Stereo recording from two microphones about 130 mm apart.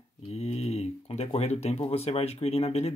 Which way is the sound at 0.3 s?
55° left (ahead or behind).